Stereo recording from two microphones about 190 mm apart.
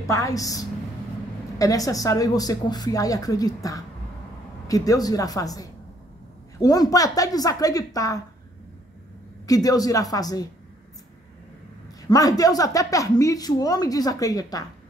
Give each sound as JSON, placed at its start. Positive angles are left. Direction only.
{"t": 0.0, "sound": "a woman's voice", "side_deg": 15}
{"t": 9.5, "sound": "speech", "side_deg": 20}
{"t": 12.0, "sound": "speech", "side_deg": 20}